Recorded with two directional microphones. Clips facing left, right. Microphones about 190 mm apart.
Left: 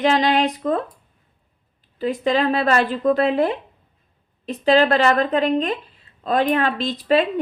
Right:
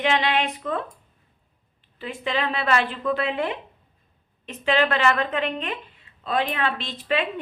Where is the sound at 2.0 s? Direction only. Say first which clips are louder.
Left 8 dB; 40° left (ahead or behind).